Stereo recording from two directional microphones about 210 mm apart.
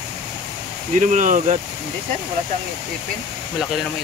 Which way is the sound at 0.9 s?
35° right (ahead or behind).